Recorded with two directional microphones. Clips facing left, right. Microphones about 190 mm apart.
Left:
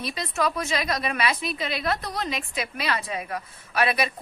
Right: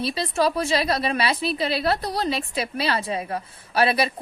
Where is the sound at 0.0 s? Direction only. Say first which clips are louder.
Right 4 dB; 30° right (ahead or behind).